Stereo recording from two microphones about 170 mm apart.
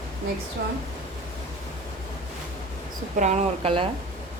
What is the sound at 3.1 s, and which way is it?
Speech, 45° right (ahead or behind).